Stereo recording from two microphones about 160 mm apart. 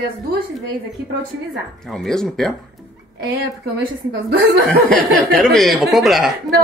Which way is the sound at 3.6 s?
90° right.